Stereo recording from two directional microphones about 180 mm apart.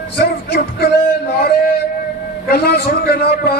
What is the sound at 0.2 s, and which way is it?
Music, 60° left (ahead or behind).